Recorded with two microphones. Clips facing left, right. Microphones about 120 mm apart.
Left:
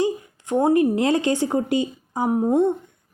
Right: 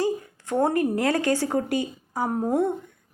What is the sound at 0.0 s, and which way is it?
A woman's voice, 20° left (ahead or behind).